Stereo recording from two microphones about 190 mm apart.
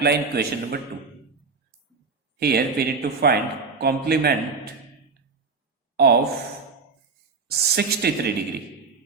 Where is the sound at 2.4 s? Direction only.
55° right (ahead or behind).